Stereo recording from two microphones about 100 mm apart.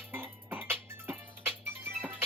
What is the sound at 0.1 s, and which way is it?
Music, 20° right (ahead or behind).